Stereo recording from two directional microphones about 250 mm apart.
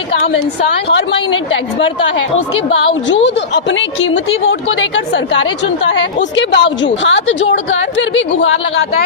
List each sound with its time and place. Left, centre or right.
0.9 s a woman's voice: left
2.6 s a woman's voice: left